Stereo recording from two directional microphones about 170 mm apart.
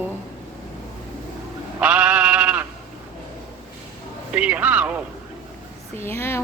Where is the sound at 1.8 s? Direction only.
5° right (ahead or behind).